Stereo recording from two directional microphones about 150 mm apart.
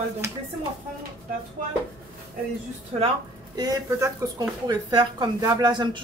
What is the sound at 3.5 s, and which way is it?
A woman's voice, 20° right (ahead or behind).